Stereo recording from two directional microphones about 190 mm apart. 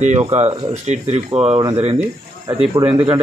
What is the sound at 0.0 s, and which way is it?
Speech, 35° right (ahead or behind).